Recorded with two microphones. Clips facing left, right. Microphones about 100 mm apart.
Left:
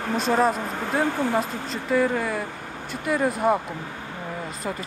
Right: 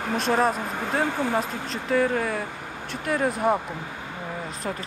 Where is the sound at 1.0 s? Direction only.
20° right (ahead or behind).